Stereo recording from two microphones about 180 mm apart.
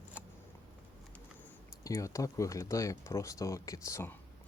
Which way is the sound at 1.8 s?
15° left (ahead or behind).